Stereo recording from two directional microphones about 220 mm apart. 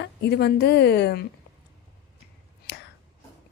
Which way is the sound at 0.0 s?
50° left (ahead or behind).